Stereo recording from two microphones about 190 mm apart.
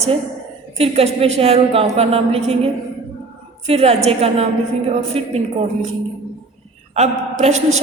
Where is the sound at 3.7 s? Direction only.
35° right (ahead or behind).